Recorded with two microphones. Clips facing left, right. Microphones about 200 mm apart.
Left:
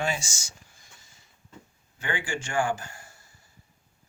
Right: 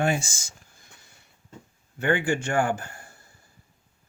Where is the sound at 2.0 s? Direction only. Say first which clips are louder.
Right 8 dB; 60° right (ahead or behind).